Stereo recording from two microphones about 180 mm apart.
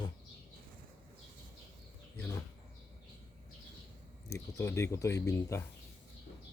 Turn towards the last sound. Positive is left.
turn(degrees=15)  # may be behind; listen again after turning